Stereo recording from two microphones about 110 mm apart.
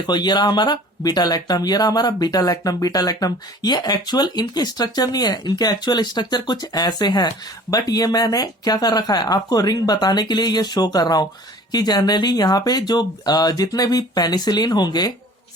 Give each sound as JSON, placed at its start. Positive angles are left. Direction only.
{"t": 0.0, "sound": "speech", "side_deg": 40}